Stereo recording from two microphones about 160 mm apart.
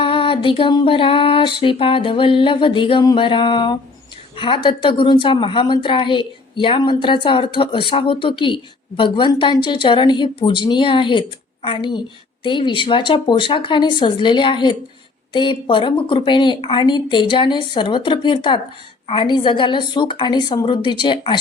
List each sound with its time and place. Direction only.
0.0 s a woman's voice: 35° left (ahead or behind)